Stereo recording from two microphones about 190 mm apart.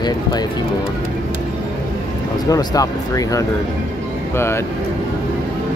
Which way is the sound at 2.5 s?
20° left (ahead or behind).